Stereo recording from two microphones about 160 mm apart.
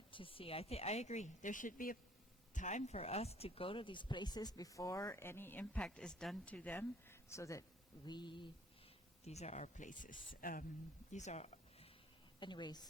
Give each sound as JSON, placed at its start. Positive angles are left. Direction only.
{"t": 0.1, "sound": "speech", "side_deg": 35}
{"t": 9.2, "sound": "speech", "side_deg": 45}
{"t": 11.1, "sound": "a sound", "side_deg": 45}
{"t": 12.4, "sound": "speech", "side_deg": 30}